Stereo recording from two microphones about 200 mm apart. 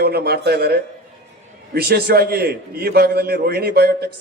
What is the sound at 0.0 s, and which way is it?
A man's voice, 50° right (ahead or behind).